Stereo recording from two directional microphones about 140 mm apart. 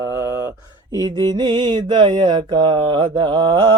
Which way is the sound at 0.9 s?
30° right (ahead or behind).